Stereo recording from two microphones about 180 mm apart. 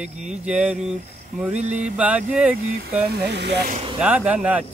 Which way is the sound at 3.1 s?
65° right (ahead or behind).